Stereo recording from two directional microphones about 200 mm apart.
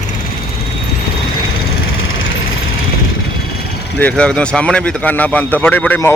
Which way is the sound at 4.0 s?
5° left (ahead or behind).